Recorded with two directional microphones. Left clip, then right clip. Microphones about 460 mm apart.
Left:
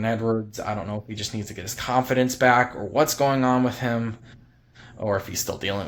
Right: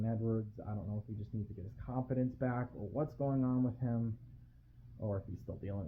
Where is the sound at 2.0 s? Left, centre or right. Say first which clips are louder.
Left 18 dB; centre.